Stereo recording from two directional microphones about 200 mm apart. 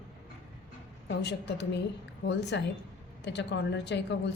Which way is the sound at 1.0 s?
60° left (ahead or behind).